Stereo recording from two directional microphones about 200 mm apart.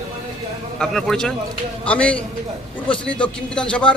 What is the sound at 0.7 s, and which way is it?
A man's voice, 5° left (ahead or behind).